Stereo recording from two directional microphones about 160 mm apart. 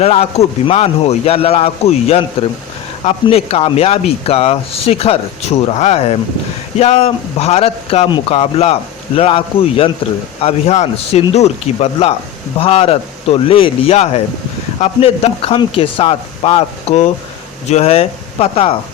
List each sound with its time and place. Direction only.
0.0 s speech: 40° left (ahead or behind)